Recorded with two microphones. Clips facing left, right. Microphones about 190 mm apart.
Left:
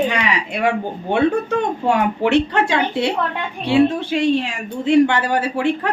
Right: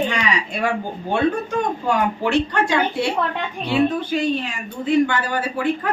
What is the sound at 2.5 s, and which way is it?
Speech, 20° left (ahead or behind).